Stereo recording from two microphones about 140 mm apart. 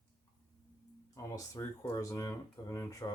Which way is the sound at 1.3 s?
25° left (ahead or behind).